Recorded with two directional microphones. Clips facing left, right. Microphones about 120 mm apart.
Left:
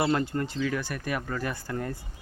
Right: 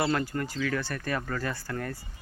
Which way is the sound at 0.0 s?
25° left (ahead or behind).